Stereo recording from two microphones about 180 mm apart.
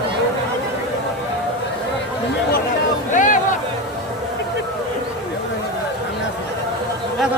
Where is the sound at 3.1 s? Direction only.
45° left (ahead or behind).